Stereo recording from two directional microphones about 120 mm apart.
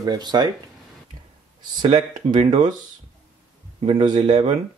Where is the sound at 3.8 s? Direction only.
45° right (ahead or behind).